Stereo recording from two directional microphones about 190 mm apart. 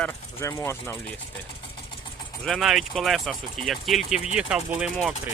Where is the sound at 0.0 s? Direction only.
15° left (ahead or behind).